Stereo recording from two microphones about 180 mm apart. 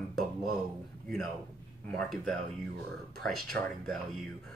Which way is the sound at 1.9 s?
5° left (ahead or behind).